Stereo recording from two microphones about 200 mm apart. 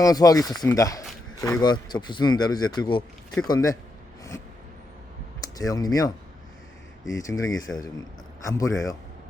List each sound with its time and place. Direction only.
0.0 s speech: 20° left (ahead or behind)
5.5 s speech: 20° left (ahead or behind)
7.2 s speech: 15° left (ahead or behind)